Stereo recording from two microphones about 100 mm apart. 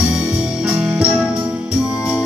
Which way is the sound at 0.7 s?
15° right (ahead or behind).